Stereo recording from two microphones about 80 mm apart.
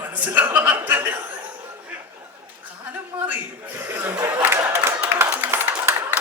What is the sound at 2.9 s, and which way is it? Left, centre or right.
Chuckle, right.